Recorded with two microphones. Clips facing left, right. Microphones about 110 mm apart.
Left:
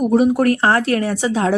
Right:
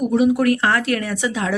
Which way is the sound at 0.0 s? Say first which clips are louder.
Left 2 dB; 40° left (ahead or behind).